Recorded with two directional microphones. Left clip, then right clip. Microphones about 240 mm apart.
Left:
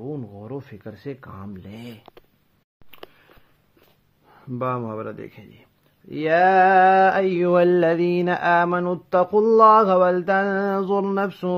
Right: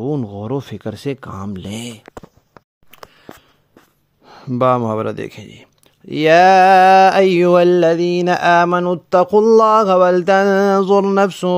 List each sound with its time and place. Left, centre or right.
0.0 s speech: right
4.3 s speech: right